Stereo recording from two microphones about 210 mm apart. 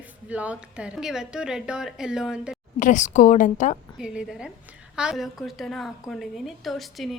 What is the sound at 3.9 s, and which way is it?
A woman's voice, 5° right (ahead or behind).